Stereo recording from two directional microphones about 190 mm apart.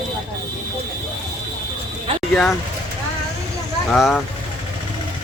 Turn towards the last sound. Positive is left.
turn(degrees=0)  # may be behind; listen again after turning